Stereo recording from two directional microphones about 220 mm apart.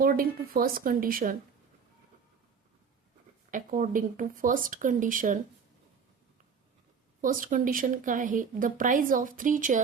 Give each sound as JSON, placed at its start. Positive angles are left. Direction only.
{"t": 0.0, "sound": "speech", "side_deg": -40}
{"t": 3.5, "sound": "speech", "side_deg": -35}
{"t": 7.2, "sound": "speech", "side_deg": -40}